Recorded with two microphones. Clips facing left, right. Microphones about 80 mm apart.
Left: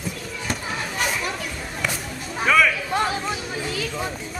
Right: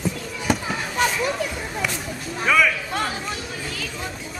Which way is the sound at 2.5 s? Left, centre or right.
Centre.